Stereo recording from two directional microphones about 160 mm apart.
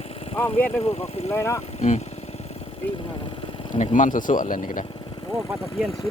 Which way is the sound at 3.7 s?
50° left (ahead or behind).